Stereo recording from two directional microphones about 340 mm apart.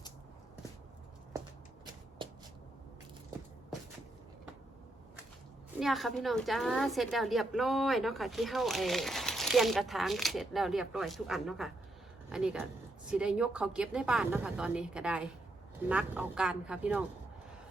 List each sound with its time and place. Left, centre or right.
2.2 s shuffling cards: centre
5.8 s a woman's voice: centre